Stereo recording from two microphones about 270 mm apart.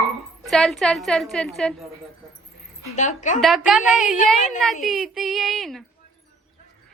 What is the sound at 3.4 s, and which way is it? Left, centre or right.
Speech, centre.